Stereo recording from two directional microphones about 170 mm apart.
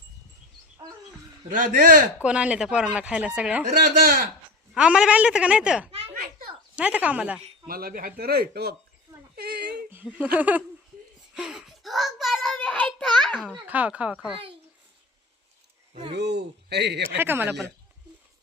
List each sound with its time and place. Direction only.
1.5 s a man's voice: 50° right (ahead or behind)
2.2 s speech: 5° right (ahead or behind)
3.9 s speech: 60° right (ahead or behind)
4.7 s speech: 5° right (ahead or behind)
7.7 s speech: 60° right (ahead or behind)
9.3 s a sound: 70° right (ahead or behind)
9.9 s a sound: 10° right (ahead or behind)
10.3 s speech: 10° right (ahead or behind)
11.3 s child singing: 5° right (ahead or behind)
13.6 s speech: 10° right (ahead or behind)
16.1 s speech: 80° right
17.2 s speech: 10° right (ahead or behind)